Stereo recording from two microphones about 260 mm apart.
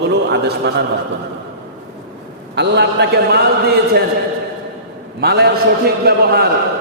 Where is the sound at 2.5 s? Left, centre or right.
Right.